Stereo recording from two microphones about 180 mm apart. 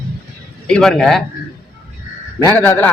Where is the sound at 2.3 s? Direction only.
15° left (ahead or behind).